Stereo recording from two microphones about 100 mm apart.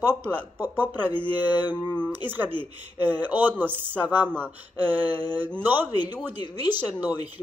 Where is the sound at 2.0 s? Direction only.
20° right (ahead or behind).